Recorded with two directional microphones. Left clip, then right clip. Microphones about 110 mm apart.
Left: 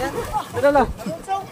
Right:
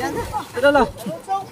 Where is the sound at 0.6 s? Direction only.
90° right.